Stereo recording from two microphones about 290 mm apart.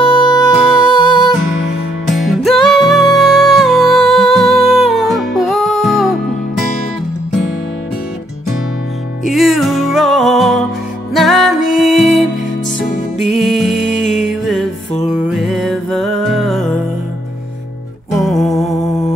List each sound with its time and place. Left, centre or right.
0.0 s music: centre
2.0 s music: centre
9.2 s music: centre
13.8 s music: left
14.4 s music: centre
18.2 s music: centre